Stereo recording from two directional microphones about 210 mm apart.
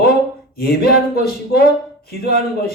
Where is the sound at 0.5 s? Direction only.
45° left (ahead or behind).